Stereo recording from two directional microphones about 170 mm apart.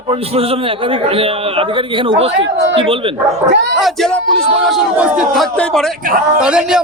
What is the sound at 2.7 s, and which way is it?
Speech, 30° right (ahead or behind).